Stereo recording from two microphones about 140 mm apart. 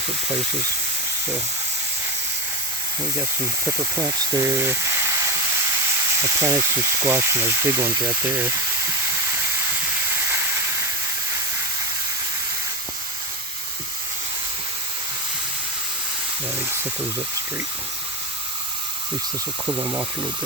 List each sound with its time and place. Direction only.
3.9 s speech: 25° right (ahead or behind)
6.2 s speech: 20° right (ahead or behind)
19.6 s speech: 20° right (ahead or behind)